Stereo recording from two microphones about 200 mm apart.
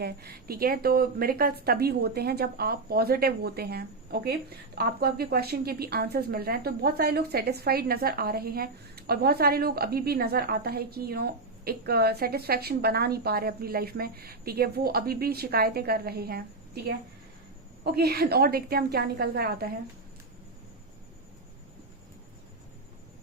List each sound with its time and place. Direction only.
0.0 s a woman's voice: 50° right (ahead or behind)
17.8 s a woman's voice: 50° right (ahead or behind)